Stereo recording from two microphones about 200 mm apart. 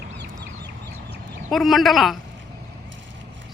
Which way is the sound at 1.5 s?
Centre (ahead or behind).